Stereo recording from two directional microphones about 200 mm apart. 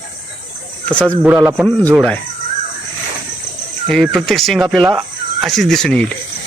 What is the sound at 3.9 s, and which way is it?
Speech, centre (ahead or behind).